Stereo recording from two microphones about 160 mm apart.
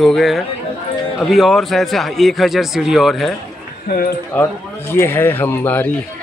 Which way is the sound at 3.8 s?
65° left (ahead or behind).